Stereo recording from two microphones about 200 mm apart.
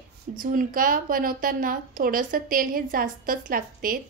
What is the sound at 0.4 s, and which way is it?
A woman's voice, 45° right (ahead or behind).